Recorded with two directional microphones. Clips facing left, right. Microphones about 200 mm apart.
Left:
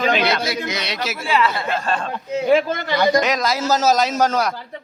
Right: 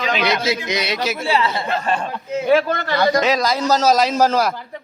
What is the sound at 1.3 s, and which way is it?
Speech, 25° right (ahead or behind).